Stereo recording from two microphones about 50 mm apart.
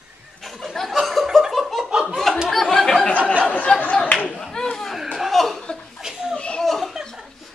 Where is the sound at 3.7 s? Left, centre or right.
Centre.